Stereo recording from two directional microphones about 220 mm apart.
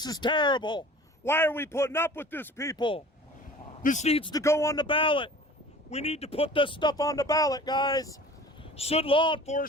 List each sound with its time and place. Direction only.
0.0 s speech: 20° left (ahead or behind)
3.8 s speech: 30° left (ahead or behind); by 8.2 s 15° left (ahead or behind)
8.7 s speech: 25° left (ahead or behind)